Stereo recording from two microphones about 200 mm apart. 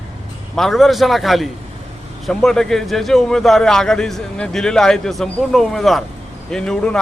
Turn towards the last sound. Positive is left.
turn(degrees=5)  # may be behind; listen again after turning